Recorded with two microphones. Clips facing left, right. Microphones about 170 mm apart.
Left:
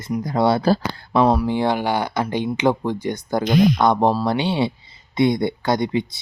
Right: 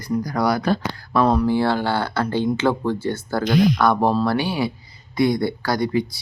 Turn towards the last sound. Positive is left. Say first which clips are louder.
# left 1 dB
turn(degrees=20)  # may be behind; listen again after turning